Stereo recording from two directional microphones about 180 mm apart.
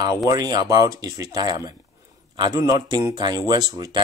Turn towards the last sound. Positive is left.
turn(degrees=-20)  # may be behind; listen again after turning